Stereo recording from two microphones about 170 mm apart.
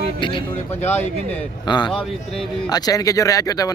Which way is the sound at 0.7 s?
40° left (ahead or behind).